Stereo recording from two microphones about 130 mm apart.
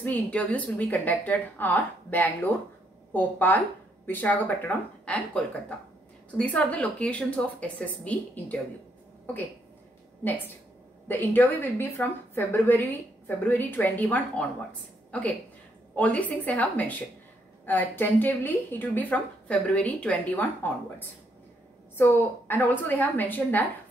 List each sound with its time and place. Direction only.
0.0 s a woman's voice: 10° left (ahead or behind)
10.2 s a woman's voice: 15° left (ahead or behind)
21.9 s a woman's voice: 15° left (ahead or behind)